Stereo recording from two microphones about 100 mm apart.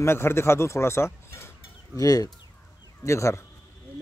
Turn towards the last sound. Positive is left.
turn(degrees=30)  # may be behind; listen again after turning